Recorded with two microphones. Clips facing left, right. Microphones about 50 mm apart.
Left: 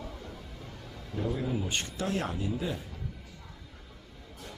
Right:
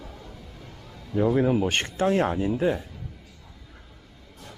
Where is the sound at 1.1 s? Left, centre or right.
Right.